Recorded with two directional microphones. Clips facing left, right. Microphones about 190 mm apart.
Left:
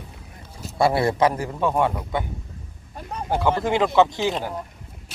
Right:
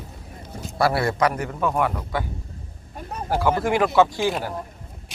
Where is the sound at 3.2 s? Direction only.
20° left (ahead or behind).